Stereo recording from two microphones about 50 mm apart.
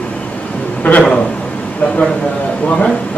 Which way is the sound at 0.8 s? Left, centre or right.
Left.